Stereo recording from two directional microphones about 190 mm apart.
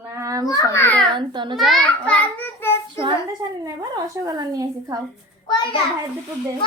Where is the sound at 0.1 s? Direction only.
15° right (ahead or behind).